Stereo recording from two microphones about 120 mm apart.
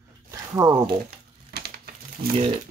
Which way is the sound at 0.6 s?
35° right (ahead or behind).